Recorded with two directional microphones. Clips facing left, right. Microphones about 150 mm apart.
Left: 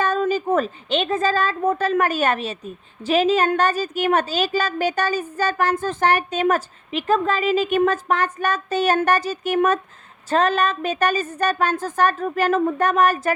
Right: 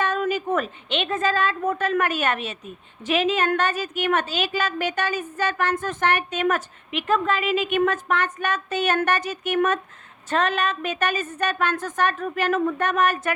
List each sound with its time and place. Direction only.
0.0 s a woman's voice: 35° left (ahead or behind)